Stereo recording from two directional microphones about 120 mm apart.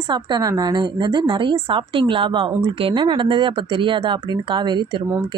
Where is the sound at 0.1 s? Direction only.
35° right (ahead or behind).